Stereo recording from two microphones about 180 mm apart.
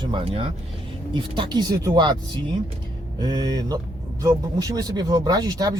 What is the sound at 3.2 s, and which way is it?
Speech, 20° right (ahead or behind).